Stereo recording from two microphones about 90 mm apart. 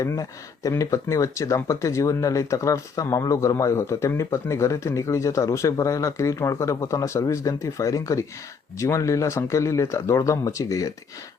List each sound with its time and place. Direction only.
0.0 s speech: 35° left (ahead or behind)